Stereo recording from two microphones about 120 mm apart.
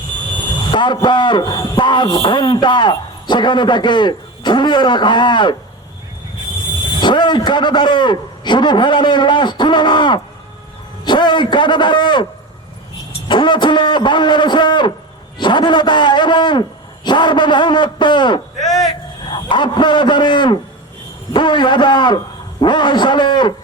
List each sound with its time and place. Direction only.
0.7 s a man's voice: 40° left (ahead or behind)
7.0 s a man's voice: 40° left (ahead or behind)
13.2 s a man's voice: 40° left (ahead or behind)